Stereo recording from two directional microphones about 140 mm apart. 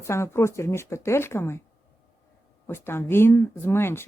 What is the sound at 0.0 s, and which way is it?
Speech, 20° left (ahead or behind).